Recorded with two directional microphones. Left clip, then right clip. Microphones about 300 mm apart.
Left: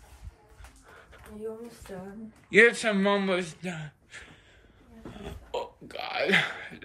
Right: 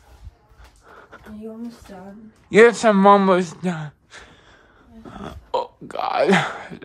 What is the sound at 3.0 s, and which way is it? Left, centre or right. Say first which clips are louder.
Speech: right 14 dB; right.